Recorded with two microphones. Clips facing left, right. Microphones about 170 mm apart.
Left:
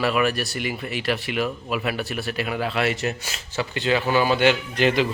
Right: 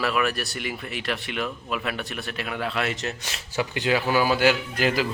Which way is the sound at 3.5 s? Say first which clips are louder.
Left 1 dB; 10° right (ahead or behind).